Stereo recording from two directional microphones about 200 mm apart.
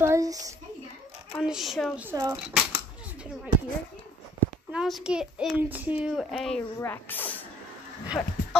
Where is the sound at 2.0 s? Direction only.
15° right (ahead or behind).